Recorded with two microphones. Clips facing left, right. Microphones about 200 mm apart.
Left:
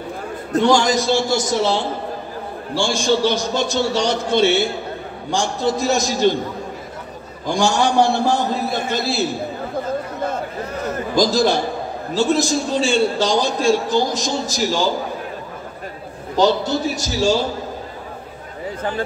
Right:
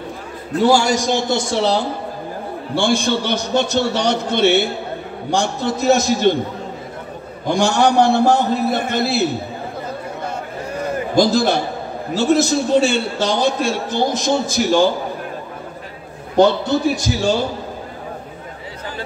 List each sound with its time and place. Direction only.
0.7 s a man's voice: 10° right (ahead or behind); by 1.9 s 35° right (ahead or behind)
2.7 s a man's voice: 60° right (ahead or behind)
7.4 s a man's voice: 60° right (ahead or behind)
11.1 s a man's voice: 60° right (ahead or behind)
16.3 s a man's voice: 60° right (ahead or behind)